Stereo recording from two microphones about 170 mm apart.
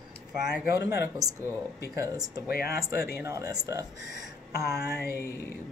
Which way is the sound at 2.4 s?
60° left (ahead or behind).